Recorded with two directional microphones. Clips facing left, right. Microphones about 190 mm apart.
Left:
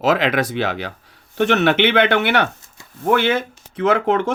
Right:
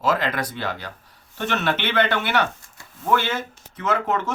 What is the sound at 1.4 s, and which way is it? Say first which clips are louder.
Speech: left 9 dB; 70° left (ahead or behind).